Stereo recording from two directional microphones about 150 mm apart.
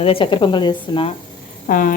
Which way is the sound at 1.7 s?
70° left (ahead or behind).